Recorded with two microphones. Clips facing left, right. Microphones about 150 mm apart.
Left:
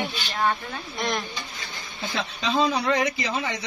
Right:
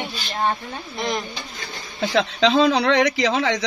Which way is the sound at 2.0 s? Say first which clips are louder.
Right 10 dB; 90° right.